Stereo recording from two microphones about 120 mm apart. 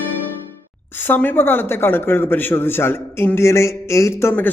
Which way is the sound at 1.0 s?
15° left (ahead or behind).